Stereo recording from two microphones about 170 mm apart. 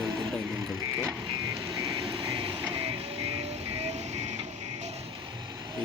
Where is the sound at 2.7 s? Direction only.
35° right (ahead or behind).